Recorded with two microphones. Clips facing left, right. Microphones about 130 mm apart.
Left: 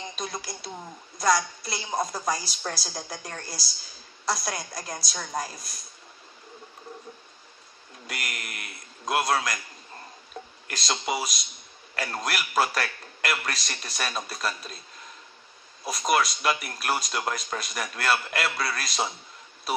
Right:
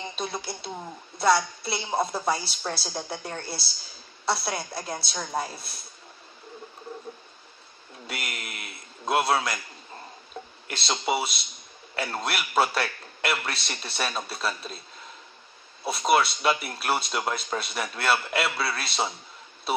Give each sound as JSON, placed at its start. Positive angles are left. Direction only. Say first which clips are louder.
{"t": 0.1, "sound": "a man's voice", "louder": "right 2 dB", "side_deg": -30}
{"t": 1.8, "sound": "a woman's voice", "louder": "right 2 dB", "side_deg": -5}
{"t": 2.0, "sound": "a man's voice", "louder": "right 2 dB", "side_deg": -30}
{"t": 8.1, "sound": "a man's voice", "louder": "right 1 dB", "side_deg": -30}
{"t": 10.7, "sound": "a man's voice", "louder": "right 2 dB", "side_deg": -30}
{"t": 16.1, "sound": "a man's voice", "louder": "right 2 dB", "side_deg": -30}